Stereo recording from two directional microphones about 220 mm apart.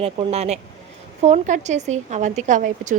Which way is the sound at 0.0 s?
25° right (ahead or behind).